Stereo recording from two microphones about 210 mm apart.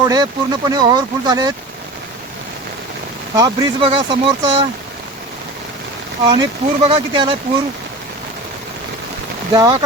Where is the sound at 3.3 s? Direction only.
20° right (ahead or behind).